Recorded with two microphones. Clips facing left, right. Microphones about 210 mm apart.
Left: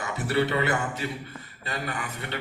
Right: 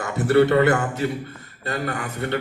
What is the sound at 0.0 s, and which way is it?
A man's voice, 50° right (ahead or behind).